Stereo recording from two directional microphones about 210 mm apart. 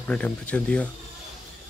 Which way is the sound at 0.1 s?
5° left (ahead or behind).